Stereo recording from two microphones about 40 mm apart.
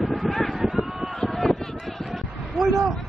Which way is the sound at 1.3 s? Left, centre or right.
Centre.